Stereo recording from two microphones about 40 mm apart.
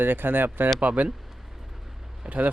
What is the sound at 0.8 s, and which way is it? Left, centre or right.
Speech, right.